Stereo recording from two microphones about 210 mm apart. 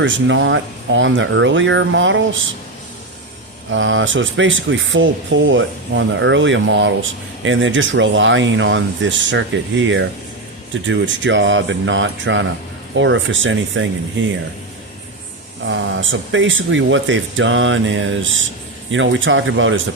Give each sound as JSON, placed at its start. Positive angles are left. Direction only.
{"t": 0.0, "sound": "speech", "side_deg": -60}
{"t": 3.7, "sound": "speech", "side_deg": -65}
{"t": 15.6, "sound": "speech", "side_deg": -65}